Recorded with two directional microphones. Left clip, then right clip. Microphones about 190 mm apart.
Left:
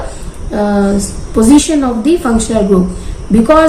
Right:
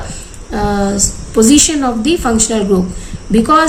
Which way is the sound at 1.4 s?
35° right (ahead or behind).